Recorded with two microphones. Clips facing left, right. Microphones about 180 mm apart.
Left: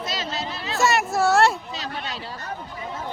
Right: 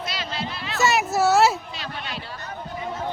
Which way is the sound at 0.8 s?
Centre (ahead or behind).